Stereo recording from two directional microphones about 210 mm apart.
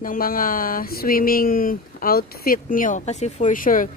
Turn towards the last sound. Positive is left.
turn(degrees=40)  # may be behind; listen again after turning